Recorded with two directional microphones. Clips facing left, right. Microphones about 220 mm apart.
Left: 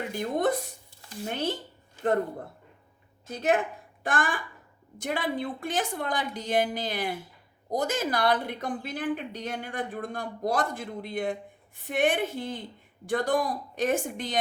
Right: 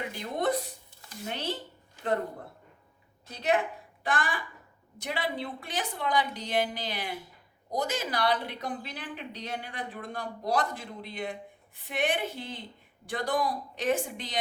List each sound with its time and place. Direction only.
0.2 s a woman's voice: 50° left (ahead or behind)
3.2 s a woman's voice: 50° left (ahead or behind)